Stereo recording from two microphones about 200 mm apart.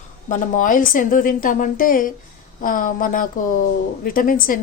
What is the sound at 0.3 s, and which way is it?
A woman's voice, 40° left (ahead or behind).